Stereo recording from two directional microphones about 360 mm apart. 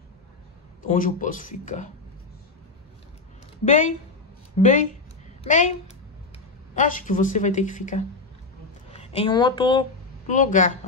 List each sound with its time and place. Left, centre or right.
0.8 s speech: left
3.6 s speech: left
6.7 s speech: left